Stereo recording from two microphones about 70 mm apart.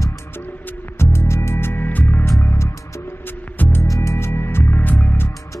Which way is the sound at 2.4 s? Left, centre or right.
Left.